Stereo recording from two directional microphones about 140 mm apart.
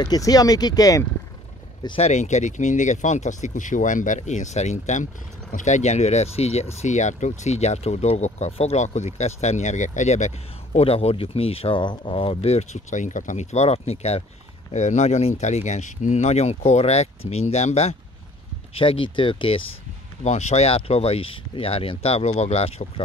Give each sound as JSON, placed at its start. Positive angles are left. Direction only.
{"t": 0.0, "sound": "speech", "side_deg": 25}
{"t": 2.0, "sound": "speech", "side_deg": 50}
{"t": 18.8, "sound": "speech", "side_deg": 40}
{"t": 20.2, "sound": "speech", "side_deg": 55}